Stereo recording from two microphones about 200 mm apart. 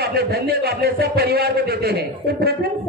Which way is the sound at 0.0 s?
50° right (ahead or behind).